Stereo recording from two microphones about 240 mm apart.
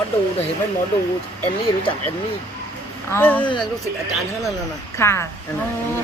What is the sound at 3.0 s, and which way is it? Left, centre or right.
Speech, centre.